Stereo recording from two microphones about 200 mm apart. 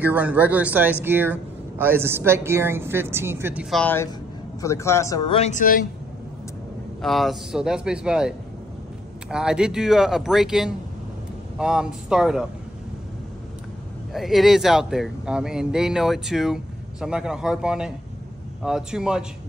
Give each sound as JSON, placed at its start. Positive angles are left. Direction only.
{"t": 0.0, "sound": "speech", "side_deg": -10}
{"t": 3.7, "sound": "speech", "side_deg": 10}
{"t": 7.0, "sound": "speech", "side_deg": 0}
{"t": 14.1, "sound": "speech", "side_deg": 0}